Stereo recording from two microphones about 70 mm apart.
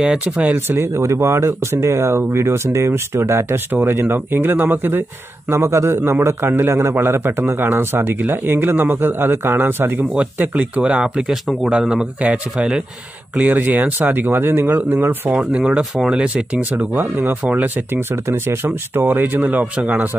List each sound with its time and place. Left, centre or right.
0.0 s a man's voice: centre
0.7 s speech: right
5.5 s a man's voice: right
10.8 s speech: centre
13.4 s a man's voice: right
15.3 s speech: centre
16.7 s a man's voice: right
18.3 s a man's voice: right